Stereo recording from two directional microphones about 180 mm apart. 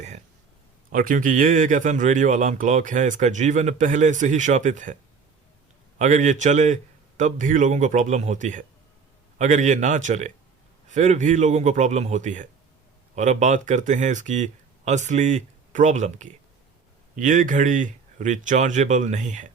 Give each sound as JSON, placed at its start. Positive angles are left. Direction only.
{"t": 0.9, "sound": "speech", "side_deg": -50}
{"t": 6.0, "sound": "speech", "side_deg": -40}